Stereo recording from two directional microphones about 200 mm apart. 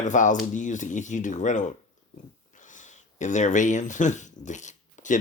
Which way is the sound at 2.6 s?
40° left (ahead or behind).